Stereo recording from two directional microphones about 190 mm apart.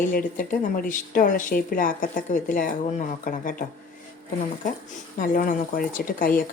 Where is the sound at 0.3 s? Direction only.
45° left (ahead or behind).